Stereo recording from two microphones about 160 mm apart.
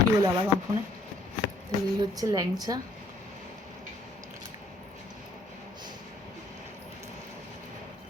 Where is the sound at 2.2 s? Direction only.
20° right (ahead or behind).